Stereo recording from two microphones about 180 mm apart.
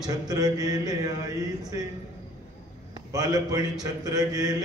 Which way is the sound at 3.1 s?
20° right (ahead or behind).